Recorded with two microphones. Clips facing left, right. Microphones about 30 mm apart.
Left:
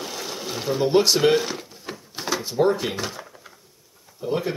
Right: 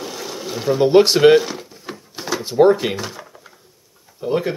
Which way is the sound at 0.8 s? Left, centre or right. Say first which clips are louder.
Right 7 dB; right.